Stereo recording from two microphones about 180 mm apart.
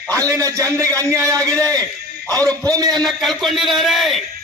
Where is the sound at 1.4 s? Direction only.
5° left (ahead or behind).